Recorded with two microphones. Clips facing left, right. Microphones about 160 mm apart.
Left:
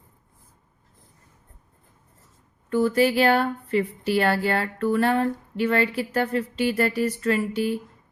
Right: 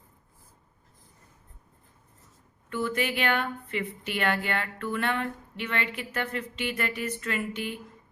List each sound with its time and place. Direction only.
2.6 s speech: 40° left (ahead or behind)